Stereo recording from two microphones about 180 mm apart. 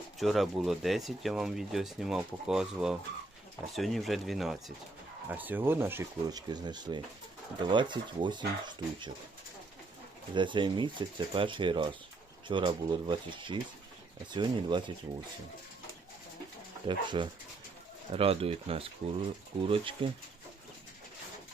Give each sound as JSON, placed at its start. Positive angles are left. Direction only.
{"t": 0.2, "sound": "speech", "side_deg": 0}
{"t": 10.3, "sound": "speech", "side_deg": -25}
{"t": 16.8, "sound": "speech", "side_deg": -25}